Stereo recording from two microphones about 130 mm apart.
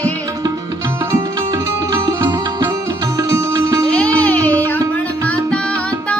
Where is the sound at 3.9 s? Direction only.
10° left (ahead or behind).